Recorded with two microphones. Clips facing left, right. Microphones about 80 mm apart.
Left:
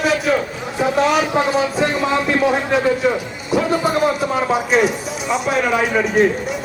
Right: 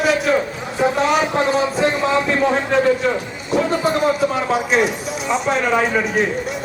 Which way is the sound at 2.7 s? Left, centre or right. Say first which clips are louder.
Even; centre.